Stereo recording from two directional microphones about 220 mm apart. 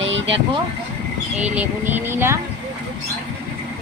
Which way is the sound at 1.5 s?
10° right (ahead or behind).